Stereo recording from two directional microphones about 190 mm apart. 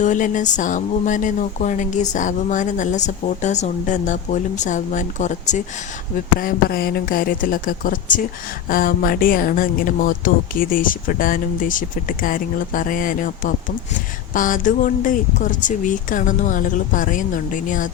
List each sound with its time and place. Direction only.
0.0 s speech: 40° left (ahead or behind)
6.4 s speech: 50° left (ahead or behind)